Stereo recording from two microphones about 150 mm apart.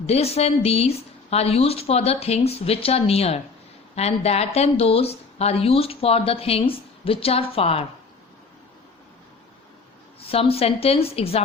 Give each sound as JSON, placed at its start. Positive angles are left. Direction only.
{"t": 0.0, "sound": "a woman's voice", "side_deg": 45}
{"t": 10.2, "sound": "speech", "side_deg": 40}